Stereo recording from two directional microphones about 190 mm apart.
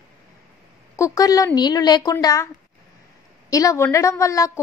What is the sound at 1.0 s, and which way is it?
A woman's voice, 20° left (ahead or behind).